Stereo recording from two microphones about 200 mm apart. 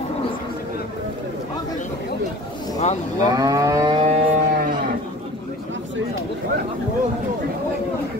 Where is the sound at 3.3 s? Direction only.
15° right (ahead or behind).